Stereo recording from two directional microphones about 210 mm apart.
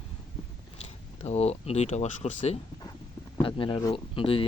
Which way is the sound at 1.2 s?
30° left (ahead or behind).